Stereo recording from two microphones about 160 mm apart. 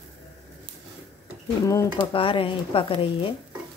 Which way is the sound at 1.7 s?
20° left (ahead or behind).